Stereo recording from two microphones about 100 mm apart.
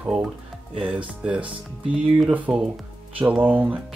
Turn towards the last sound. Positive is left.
turn(degrees=-15)  # may be behind; listen again after turning